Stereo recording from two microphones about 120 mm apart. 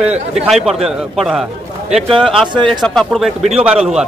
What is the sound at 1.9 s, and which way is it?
Speech, 50° right (ahead or behind).